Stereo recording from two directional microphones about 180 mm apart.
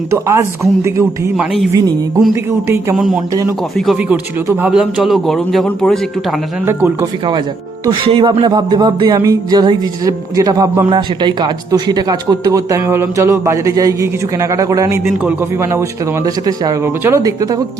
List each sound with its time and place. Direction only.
0.1 s speech: 15° right (ahead or behind)
3.8 s speech: 5° right (ahead or behind)
6.7 s speech: 15° right (ahead or behind)
7.9 s music: 25° right (ahead or behind)
15.2 s speech: 10° right (ahead or behind)
17.0 s music: 15° right (ahead or behind)